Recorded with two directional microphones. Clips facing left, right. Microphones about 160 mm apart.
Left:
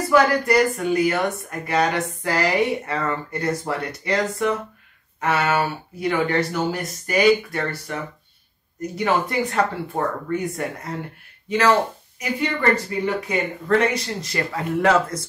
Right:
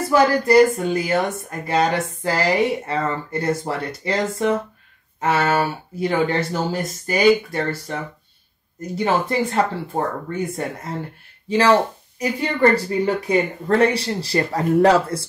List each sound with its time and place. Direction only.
0.1 s speech: 30° right (ahead or behind)